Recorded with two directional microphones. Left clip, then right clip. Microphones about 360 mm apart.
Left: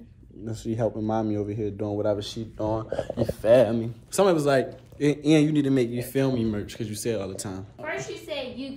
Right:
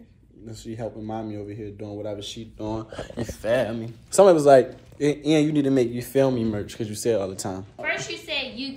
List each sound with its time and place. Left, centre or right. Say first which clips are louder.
0.5 s speech: left 6 dB; left
4.1 s a man's voice: right 7 dB; centre